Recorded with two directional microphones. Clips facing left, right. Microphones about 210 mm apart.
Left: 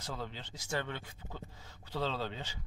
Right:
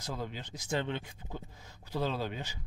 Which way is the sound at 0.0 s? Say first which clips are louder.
Right 3 dB; 15° right (ahead or behind).